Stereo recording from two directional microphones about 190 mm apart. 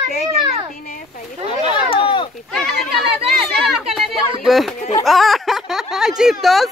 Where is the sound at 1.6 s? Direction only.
25° left (ahead or behind).